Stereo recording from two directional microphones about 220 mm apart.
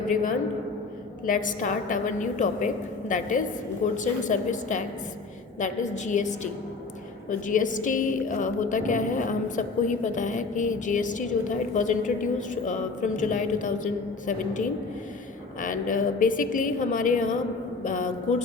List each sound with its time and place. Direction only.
0.1 s a woman's voice: 40° left (ahead or behind)